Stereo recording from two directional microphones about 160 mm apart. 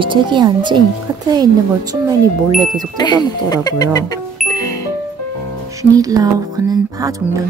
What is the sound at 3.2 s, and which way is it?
Speech, 25° left (ahead or behind).